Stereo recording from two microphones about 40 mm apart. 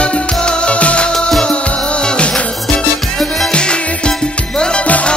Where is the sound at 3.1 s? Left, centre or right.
Centre.